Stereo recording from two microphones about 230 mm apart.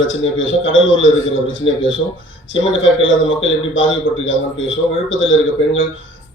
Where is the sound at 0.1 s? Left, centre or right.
Left.